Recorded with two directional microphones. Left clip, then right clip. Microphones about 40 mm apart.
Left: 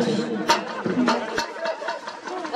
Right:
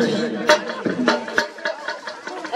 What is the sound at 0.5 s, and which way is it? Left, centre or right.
Music, right.